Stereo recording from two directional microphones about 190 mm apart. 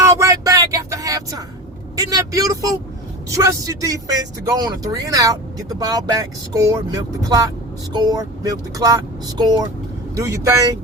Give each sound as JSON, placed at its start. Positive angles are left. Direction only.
{"t": 0.0, "sound": "vehicle", "side_deg": -15}
{"t": 2.3, "sound": "speech", "side_deg": -20}